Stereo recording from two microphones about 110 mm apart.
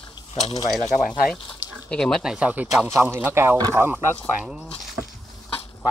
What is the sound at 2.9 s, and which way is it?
Speech, 20° right (ahead or behind).